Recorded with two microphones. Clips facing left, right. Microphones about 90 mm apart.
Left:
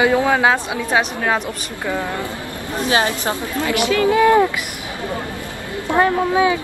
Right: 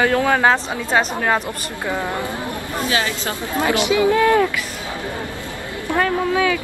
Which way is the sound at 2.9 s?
30° left (ahead or behind).